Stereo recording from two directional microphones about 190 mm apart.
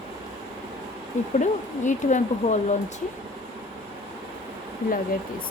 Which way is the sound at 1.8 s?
40° left (ahead or behind).